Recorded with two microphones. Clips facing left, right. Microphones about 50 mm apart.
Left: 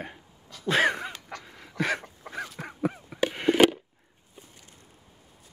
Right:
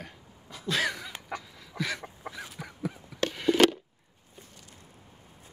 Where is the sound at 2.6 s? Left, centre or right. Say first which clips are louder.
Left 6 dB; left.